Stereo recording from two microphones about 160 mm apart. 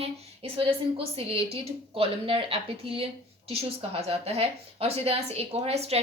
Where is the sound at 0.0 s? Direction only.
35° right (ahead or behind).